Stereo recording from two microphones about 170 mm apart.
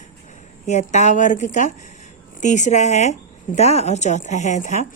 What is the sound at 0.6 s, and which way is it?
Speech, 45° left (ahead or behind).